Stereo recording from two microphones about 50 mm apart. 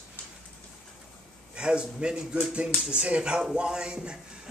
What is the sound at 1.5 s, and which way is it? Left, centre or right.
A man's voice, centre.